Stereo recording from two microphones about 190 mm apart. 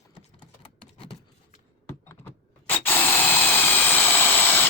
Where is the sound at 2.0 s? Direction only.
10° left (ahead or behind).